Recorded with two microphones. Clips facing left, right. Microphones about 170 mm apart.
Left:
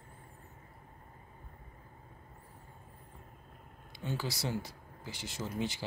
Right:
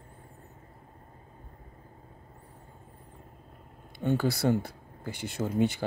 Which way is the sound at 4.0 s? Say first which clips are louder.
Right 11 dB; 60° right (ahead or behind).